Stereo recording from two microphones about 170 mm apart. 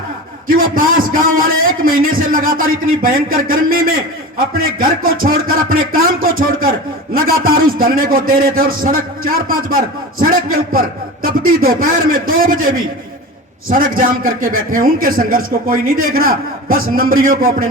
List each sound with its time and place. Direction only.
0.4 s a man's voice: 55° right (ahead or behind)